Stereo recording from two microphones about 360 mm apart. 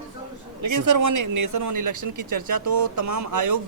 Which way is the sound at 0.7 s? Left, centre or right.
Right.